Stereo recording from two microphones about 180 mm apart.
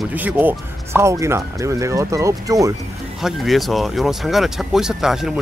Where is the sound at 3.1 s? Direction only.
Centre (ahead or behind).